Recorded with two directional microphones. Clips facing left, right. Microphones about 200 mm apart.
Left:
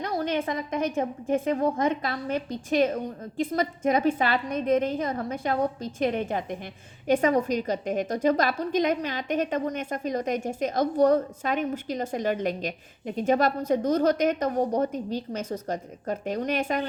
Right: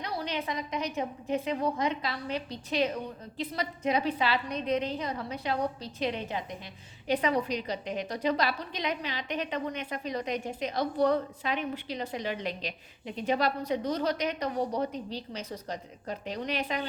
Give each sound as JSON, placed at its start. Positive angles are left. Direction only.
{"t": 0.0, "sound": "a woman's voice", "side_deg": 50}